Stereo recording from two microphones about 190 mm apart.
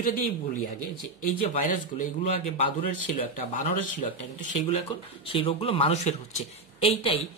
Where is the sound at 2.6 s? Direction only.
30° left (ahead or behind).